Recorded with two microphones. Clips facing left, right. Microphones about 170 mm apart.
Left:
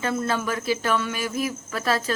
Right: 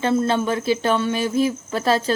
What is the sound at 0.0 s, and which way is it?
A woman's voice, 25° right (ahead or behind).